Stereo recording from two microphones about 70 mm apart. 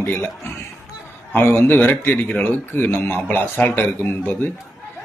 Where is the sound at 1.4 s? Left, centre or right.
Left.